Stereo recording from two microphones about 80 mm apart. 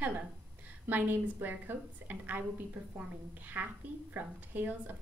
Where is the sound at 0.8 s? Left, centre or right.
Right.